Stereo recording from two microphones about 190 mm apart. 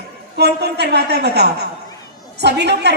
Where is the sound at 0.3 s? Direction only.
60° right (ahead or behind).